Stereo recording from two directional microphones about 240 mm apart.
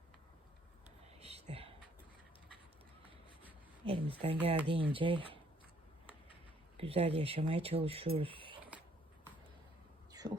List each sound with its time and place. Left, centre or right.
1.2 s whispering: right
3.8 s speech: right
6.7 s speech: right
10.1 s a sound: centre